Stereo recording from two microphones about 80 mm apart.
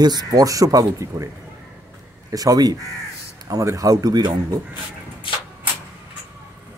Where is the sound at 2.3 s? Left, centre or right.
Right.